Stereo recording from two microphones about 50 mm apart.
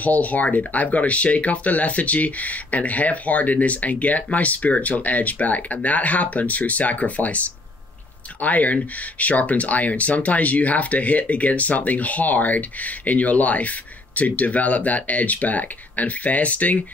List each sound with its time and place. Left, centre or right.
0.0 s speech: left